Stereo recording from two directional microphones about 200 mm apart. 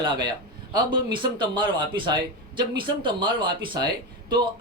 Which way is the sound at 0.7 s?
25° right (ahead or behind).